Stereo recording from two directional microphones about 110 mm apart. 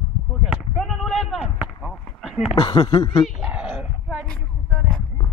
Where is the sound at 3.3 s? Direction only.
Centre (ahead or behind).